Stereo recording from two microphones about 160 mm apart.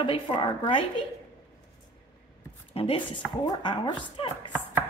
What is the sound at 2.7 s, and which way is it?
A woman's voice, 35° left (ahead or behind).